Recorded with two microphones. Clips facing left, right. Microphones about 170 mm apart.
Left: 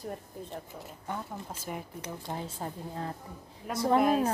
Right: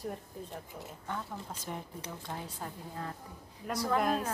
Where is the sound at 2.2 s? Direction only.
25° left (ahead or behind).